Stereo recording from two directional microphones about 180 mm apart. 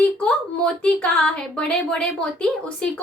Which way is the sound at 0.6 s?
5° left (ahead or behind).